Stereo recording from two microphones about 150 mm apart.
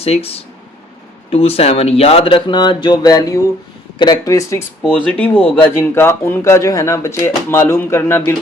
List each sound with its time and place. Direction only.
0.0 s speech: 40° left (ahead or behind); by 4.9 s 20° left (ahead or behind)
4.9 s speech: 10° left (ahead or behind)